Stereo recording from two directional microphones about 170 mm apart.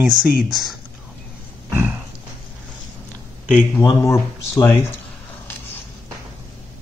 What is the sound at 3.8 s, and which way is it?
Speech, 20° left (ahead or behind).